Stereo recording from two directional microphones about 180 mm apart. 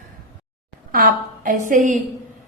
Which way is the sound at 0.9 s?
50° right (ahead or behind).